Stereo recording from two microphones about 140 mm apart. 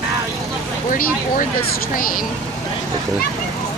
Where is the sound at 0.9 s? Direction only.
75° left (ahead or behind).